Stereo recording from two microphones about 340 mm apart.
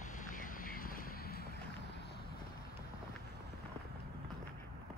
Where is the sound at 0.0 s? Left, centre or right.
Left.